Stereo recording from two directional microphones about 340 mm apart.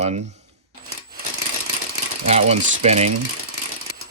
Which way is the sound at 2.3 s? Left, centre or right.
Centre.